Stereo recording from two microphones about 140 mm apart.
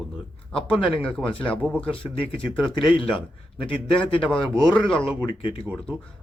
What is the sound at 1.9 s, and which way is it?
Speech, 40° left (ahead or behind).